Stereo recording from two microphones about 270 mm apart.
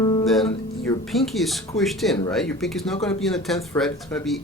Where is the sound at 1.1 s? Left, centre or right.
Centre.